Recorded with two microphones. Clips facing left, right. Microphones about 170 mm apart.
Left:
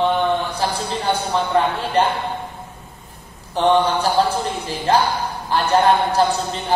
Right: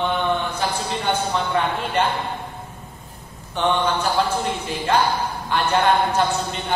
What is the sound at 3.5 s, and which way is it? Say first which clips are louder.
A woman's voice: left 5 dB; 35° left (ahead or behind).